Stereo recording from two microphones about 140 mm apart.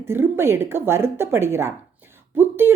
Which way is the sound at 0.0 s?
15° right (ahead or behind).